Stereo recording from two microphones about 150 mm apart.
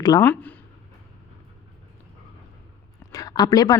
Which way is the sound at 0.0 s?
25° left (ahead or behind).